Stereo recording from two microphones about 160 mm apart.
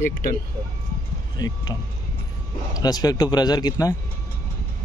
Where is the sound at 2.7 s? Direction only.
25° left (ahead or behind).